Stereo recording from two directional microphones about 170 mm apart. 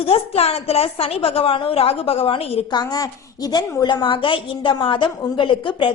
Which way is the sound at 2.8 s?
20° left (ahead or behind).